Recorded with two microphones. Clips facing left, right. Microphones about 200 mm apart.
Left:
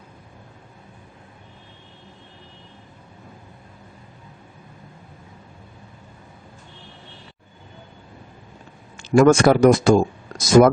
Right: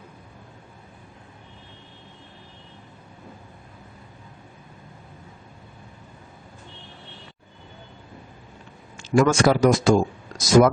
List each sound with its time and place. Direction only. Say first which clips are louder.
9.0 s a man's voice: left 5 dB; 55° left (ahead or behind)